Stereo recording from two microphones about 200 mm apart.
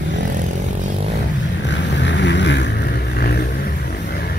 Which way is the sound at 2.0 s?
60° left (ahead or behind).